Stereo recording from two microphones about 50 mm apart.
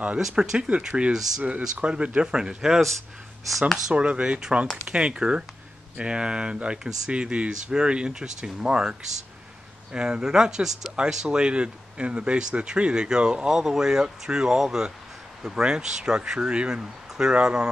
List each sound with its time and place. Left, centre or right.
0.3 s speech: centre
3.4 s speech: centre
3.9 s speech: right
9.9 s speech: centre